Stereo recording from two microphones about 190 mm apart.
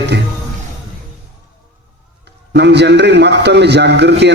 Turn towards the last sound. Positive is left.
turn(degrees=-65)  # may be behind; listen again after turning